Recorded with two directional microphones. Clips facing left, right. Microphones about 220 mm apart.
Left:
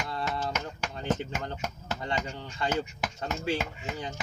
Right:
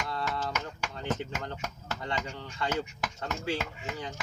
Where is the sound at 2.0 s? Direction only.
25° left (ahead or behind).